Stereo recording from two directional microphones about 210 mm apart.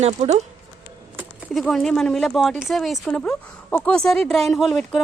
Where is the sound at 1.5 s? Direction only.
Centre (ahead or behind).